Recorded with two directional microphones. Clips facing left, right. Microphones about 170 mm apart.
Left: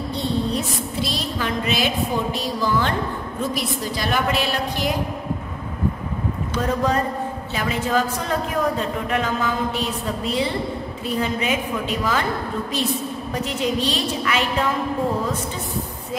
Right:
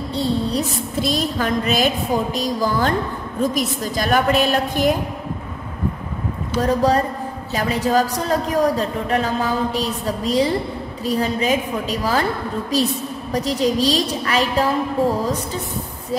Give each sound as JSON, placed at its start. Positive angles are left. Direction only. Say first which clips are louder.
{"t": 0.1, "sound": "a woman's voice", "louder": "right 3 dB", "side_deg": -35}
{"t": 6.6, "sound": "a woman's voice", "louder": "right 4 dB", "side_deg": -35}
{"t": 13.3, "sound": "a woman's voice", "louder": "right 5 dB", "side_deg": -35}